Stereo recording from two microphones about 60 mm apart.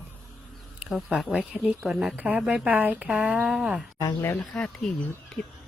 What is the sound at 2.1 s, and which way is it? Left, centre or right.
Speech, right.